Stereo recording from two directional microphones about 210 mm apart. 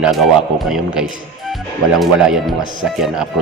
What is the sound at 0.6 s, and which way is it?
Speech, centre (ahead or behind).